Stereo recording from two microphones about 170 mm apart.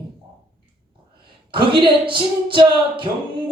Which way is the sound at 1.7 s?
30° right (ahead or behind).